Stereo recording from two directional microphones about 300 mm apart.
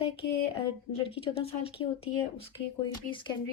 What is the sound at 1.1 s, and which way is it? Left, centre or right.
Speech, centre.